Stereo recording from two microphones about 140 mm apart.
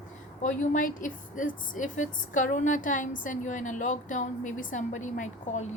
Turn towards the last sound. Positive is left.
turn(degrees=60)  # may be behind; listen again after turning